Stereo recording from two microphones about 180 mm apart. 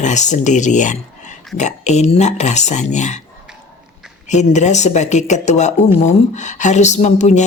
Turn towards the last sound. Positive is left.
turn(degrees=40)  # may be behind; listen again after turning